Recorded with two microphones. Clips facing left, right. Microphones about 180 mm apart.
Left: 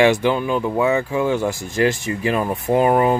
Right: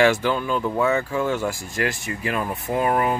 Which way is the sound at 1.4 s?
25° left (ahead or behind).